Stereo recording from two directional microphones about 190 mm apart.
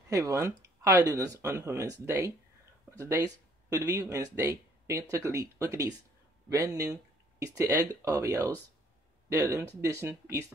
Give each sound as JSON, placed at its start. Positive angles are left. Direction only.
{"t": 0.1, "sound": "speech", "side_deg": -15}